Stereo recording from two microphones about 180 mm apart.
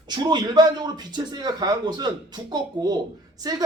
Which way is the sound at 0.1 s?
25° right (ahead or behind).